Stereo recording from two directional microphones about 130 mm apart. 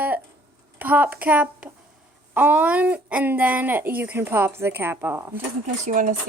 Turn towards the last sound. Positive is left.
turn(degrees=-80)